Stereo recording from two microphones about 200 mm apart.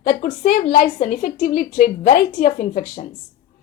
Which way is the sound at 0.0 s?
40° left (ahead or behind).